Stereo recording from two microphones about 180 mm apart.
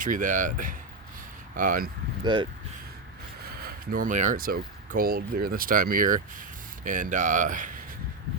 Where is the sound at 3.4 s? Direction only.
55° right (ahead or behind).